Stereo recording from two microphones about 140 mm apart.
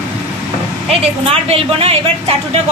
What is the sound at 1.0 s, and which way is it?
A woman's voice, 45° right (ahead or behind).